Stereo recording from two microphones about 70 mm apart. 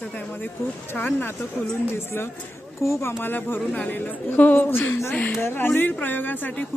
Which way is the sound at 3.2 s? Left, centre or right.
Left.